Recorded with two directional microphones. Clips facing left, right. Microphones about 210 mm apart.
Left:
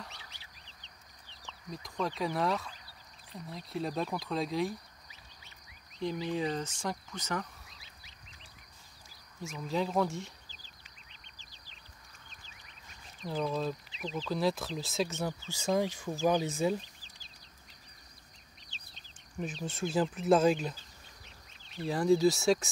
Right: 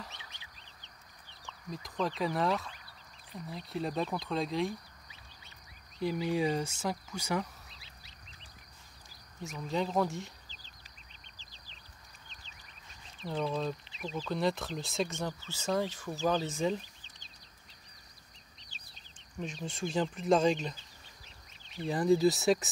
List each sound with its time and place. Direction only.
0.1 s fowl: 20° right (ahead or behind)
1.7 s speech: centre (ahead or behind)
5.9 s speech: 5° right (ahead or behind)
9.4 s speech: centre (ahead or behind)
13.2 s speech: centre (ahead or behind)
19.4 s speech: 5° left (ahead or behind)
21.8 s speech: centre (ahead or behind)